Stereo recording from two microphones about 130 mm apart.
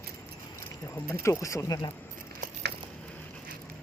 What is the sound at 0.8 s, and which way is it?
Speech, 20° left (ahead or behind).